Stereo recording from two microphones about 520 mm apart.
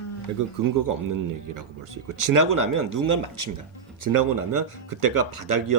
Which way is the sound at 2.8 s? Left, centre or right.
Right.